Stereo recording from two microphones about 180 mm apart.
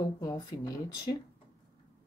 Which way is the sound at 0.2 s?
20° left (ahead or behind).